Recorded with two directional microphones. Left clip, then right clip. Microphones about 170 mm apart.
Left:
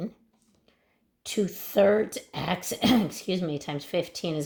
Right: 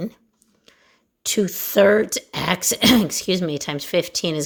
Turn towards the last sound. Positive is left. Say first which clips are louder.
# right 8 dB
turn(degrees=-40)  # may be behind; listen again after turning